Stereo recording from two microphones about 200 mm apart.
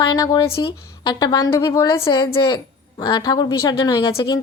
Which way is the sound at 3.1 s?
20° left (ahead or behind).